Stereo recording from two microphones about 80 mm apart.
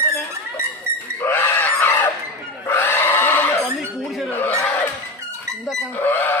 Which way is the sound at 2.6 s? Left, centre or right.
Left.